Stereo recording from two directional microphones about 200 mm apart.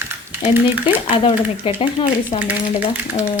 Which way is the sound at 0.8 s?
25° left (ahead or behind).